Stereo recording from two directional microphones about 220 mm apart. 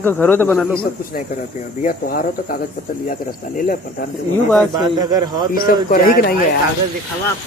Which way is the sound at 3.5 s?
40° left (ahead or behind).